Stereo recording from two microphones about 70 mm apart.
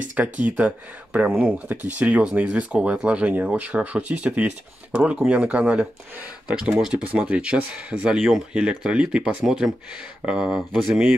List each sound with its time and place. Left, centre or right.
0.1 s speech: right; by 11.0 s centre